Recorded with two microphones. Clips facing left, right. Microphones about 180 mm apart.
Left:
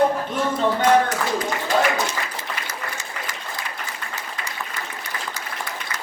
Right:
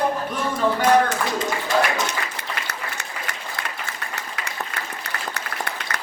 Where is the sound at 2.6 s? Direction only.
65° right (ahead or behind).